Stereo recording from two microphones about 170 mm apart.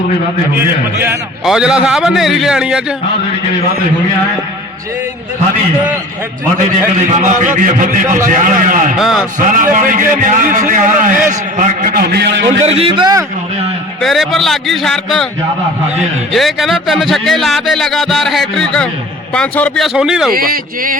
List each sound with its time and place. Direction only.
1.5 s speech: 5° right (ahead or behind)
7.2 s a man's voice: 45° right (ahead or behind)
9.0 s speech: centre (ahead or behind)
9.4 s a man's voice: 50° right (ahead or behind); by 12.4 s 75° right (ahead or behind)
12.6 s a man's voice: 35° right (ahead or behind)
14.0 s speech: centre (ahead or behind)
16.3 s speech: centre (ahead or behind)
20.3 s a man's voice: 60° right (ahead or behind)